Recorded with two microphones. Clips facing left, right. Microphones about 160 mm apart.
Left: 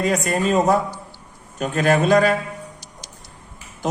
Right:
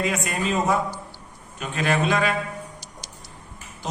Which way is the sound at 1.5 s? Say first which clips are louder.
Left 6 dB; 45° left (ahead or behind).